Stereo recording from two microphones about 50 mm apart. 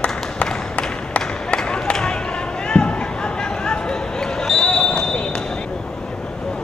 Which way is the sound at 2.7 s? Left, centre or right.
Centre.